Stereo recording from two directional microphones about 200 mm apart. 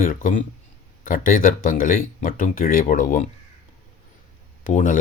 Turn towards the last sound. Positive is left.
turn(degrees=40)  # may be behind; listen again after turning